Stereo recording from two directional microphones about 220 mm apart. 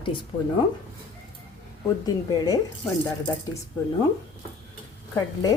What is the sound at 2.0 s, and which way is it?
Speech, 15° left (ahead or behind).